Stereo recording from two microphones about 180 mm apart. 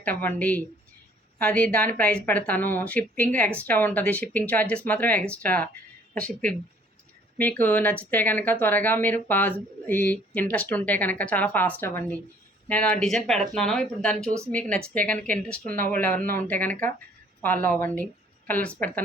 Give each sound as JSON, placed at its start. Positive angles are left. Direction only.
{"t": 0.0, "sound": "speech", "side_deg": 10}
{"t": 15.7, "sound": "speech", "side_deg": -50}
{"t": 16.0, "sound": "a woman's voice", "side_deg": 10}